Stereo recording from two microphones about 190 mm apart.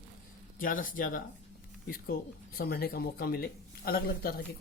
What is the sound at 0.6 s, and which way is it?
Speech, 45° left (ahead or behind).